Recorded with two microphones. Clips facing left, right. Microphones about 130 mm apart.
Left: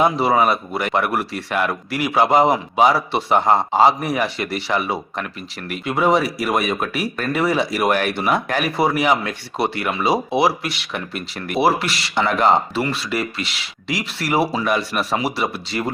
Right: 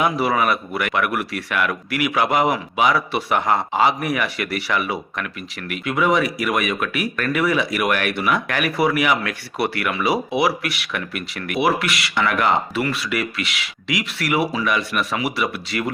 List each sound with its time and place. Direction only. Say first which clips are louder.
0.0 s speech: left 3 dB; 25° left (ahead or behind)